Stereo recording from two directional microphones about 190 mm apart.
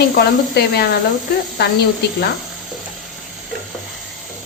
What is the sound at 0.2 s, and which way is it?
Speech, 60° left (ahead or behind).